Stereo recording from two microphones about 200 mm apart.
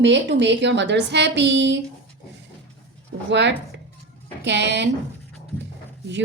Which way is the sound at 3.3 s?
60° right (ahead or behind).